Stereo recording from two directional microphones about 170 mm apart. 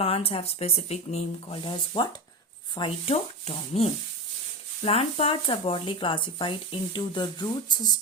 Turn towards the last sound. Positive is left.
turn(degrees=25)  # may be behind; listen again after turning